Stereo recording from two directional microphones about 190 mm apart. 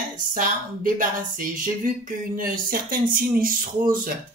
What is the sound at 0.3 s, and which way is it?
Speech, 45° right (ahead or behind).